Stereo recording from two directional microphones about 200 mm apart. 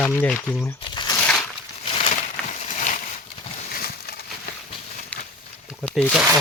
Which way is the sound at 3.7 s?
50° left (ahead or behind).